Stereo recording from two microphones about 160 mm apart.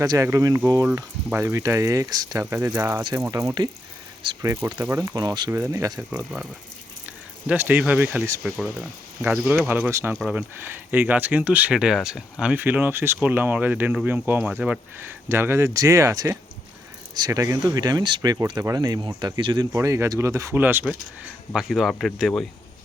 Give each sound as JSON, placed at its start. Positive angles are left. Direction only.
{"t": 0.0, "sound": "speech", "side_deg": -20}
{"t": 4.8, "sound": "speech", "side_deg": -15}
{"t": 5.5, "sound": "speech", "side_deg": -15}
{"t": 19.7, "sound": "speech", "side_deg": -20}
{"t": 21.5, "sound": "speech", "side_deg": 0}